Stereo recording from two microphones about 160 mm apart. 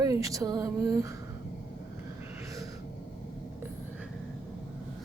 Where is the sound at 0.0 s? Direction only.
20° right (ahead or behind).